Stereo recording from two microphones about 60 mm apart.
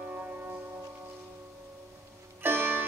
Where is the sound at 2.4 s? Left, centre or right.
Right.